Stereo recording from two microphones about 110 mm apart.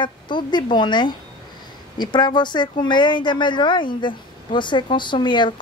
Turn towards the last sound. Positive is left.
turn(degrees=45)  # may be behind; listen again after turning